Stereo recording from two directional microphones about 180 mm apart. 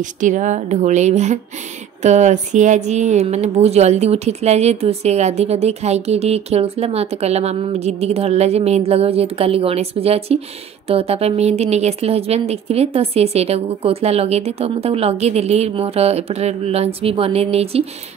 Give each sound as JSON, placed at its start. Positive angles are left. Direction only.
{"t": 0.0, "sound": "a woman's voice", "side_deg": -45}